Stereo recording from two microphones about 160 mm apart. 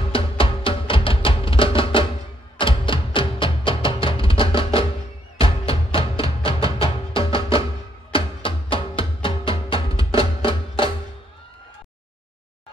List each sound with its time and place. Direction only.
0.1 s music: 35° left (ahead or behind)